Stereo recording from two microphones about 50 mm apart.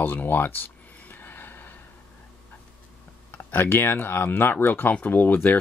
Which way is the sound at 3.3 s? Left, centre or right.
Left.